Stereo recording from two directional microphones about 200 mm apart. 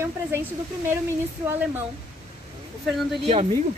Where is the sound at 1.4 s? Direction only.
10° right (ahead or behind).